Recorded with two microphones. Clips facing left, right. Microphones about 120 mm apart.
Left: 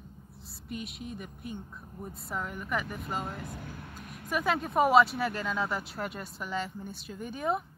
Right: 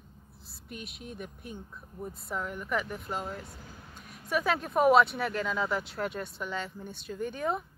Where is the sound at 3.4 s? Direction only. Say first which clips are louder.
Left 6 dB; 65° left (ahead or behind).